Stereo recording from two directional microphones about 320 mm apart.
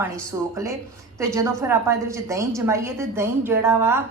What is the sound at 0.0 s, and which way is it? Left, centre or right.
A woman's voice, centre.